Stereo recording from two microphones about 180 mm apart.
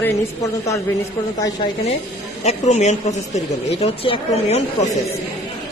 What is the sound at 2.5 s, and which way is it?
A woman's voice, 40° left (ahead or behind).